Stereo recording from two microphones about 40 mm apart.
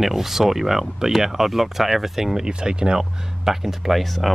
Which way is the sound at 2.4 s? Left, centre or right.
Right.